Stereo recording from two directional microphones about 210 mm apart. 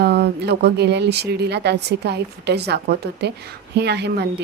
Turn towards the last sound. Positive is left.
turn(degrees=-50)  # may be behind; listen again after turning